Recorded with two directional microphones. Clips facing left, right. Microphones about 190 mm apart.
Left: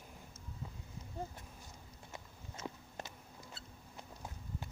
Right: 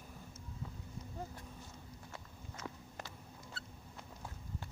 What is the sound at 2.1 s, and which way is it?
Walk, 20° left (ahead or behind).